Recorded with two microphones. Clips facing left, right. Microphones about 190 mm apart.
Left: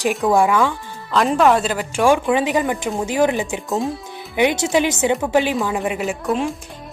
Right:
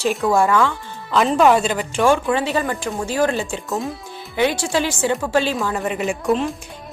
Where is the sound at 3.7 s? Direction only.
Centre (ahead or behind).